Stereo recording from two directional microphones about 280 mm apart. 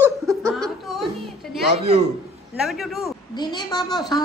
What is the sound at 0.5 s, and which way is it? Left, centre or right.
Chuckle, centre.